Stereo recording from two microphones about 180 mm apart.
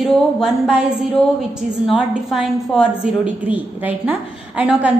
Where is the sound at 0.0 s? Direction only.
5° right (ahead or behind).